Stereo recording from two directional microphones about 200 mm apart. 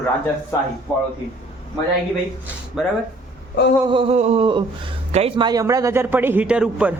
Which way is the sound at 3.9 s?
30° right (ahead or behind).